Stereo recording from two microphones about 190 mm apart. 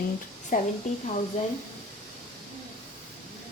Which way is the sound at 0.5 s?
40° left (ahead or behind).